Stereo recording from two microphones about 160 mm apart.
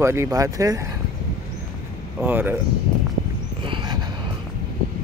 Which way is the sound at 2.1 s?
10° right (ahead or behind).